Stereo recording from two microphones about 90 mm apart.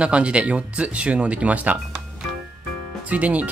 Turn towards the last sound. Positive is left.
turn(degrees=-15)  # may be behind; listen again after turning